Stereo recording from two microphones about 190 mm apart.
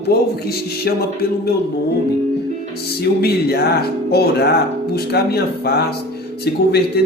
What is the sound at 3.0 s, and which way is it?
Speech, 55° left (ahead or behind).